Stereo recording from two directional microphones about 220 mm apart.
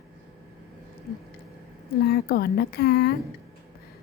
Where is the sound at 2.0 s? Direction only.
45° left (ahead or behind).